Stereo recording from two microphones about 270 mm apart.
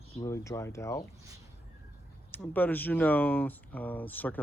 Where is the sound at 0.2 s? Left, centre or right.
Centre.